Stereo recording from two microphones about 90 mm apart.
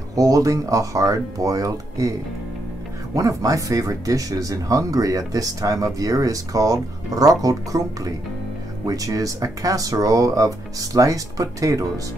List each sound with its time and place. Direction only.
0.1 s speech: 40° right (ahead or behind)
3.2 s speech: 40° right (ahead or behind)